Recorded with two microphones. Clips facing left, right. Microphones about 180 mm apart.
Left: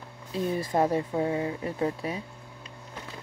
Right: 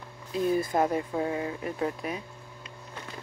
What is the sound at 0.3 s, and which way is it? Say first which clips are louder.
Speech: right 2 dB; 25° left (ahead or behind).